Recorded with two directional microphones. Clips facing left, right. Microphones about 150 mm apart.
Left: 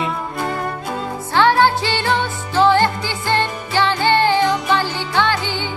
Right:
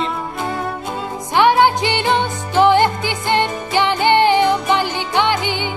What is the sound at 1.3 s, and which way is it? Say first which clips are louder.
Music: right 1 dB; 15° right (ahead or behind).